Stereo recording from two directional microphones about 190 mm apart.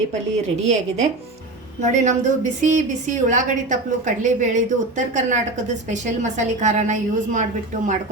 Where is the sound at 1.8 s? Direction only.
40° right (ahead or behind).